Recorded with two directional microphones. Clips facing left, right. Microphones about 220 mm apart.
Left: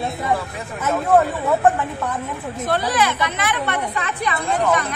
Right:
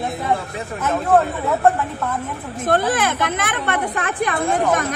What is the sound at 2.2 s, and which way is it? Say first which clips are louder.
A woman's voice: right 1 dB; 50° right (ahead or behind).